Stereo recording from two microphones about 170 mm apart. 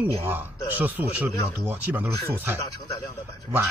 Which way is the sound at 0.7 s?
10° right (ahead or behind).